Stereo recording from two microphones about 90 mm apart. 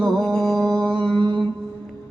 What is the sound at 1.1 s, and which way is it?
Mantra, 65° right (ahead or behind).